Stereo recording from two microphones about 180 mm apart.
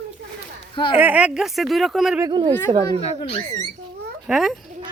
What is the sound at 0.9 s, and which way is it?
A woman's voice, 10° right (ahead or behind).